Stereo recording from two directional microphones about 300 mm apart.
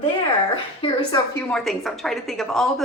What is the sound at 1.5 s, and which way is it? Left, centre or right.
A woman's voice, centre.